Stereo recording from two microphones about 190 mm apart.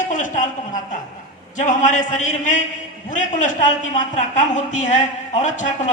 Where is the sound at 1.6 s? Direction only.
40° left (ahead or behind).